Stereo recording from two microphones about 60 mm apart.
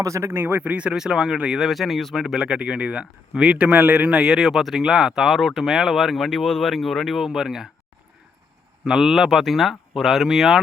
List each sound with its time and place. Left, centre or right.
0.0 s speech: right; by 7.7 s centre
8.8 s speech: centre